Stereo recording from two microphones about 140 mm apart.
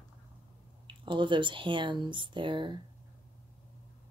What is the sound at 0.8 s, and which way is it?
Speech, 35° right (ahead or behind).